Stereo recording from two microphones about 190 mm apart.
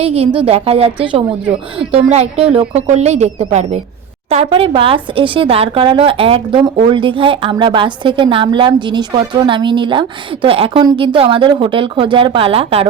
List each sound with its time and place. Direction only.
0.0 s a woman's voice: 30° right (ahead or behind)